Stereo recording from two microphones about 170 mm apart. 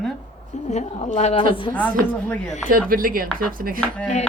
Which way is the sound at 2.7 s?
55° right (ahead or behind).